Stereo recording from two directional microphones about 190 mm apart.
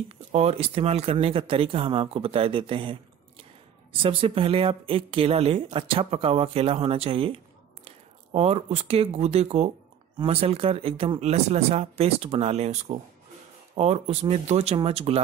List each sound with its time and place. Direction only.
0.3 s speech: 35° right (ahead or behind)